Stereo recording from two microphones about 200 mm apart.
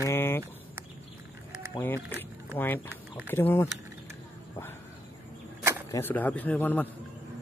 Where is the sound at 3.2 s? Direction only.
10° left (ahead or behind).